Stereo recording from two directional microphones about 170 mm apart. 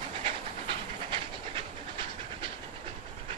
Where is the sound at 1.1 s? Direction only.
30° right (ahead or behind).